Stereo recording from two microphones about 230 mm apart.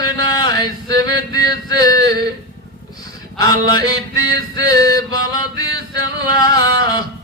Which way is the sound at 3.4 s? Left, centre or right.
Centre.